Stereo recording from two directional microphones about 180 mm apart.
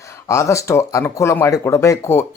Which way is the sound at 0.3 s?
15° left (ahead or behind).